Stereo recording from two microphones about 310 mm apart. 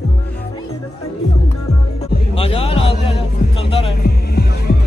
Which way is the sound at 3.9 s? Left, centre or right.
Left.